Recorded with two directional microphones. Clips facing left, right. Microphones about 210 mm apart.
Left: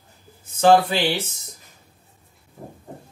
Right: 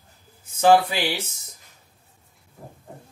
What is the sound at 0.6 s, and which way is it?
Speech, 10° right (ahead or behind).